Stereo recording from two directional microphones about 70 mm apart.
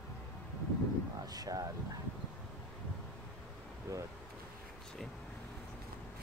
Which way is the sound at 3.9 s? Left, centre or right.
Right.